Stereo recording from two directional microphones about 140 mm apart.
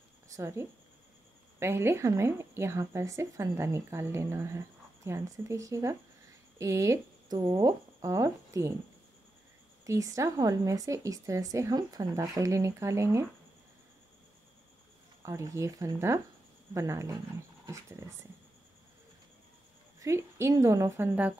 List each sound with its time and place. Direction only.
0.3 s a woman's voice: 20° right (ahead or behind)
9.8 s a woman's voice: 25° right (ahead or behind)
15.2 s a woman's voice: 20° right (ahead or behind)
20.0 s a woman's voice: 20° right (ahead or behind)